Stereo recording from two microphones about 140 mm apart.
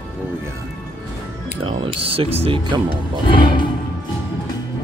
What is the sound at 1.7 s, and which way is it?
Speech, 40° right (ahead or behind).